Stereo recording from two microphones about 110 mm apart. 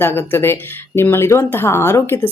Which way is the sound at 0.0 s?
20° left (ahead or behind).